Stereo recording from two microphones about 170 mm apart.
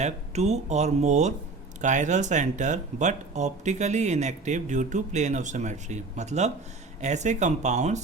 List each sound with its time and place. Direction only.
0.0 s speech: 40° right (ahead or behind)